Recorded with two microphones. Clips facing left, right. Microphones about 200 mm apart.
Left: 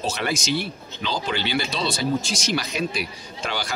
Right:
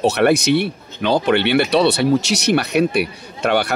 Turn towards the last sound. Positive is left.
turn(degrees=-60)  # may be behind; listen again after turning